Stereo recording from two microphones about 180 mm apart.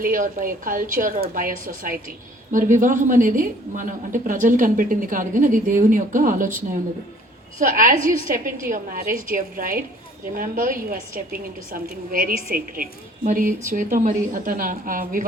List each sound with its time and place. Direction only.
0.0 s a woman's voice: 50° right (ahead or behind)
7.6 s a woman's voice: 50° right (ahead or behind)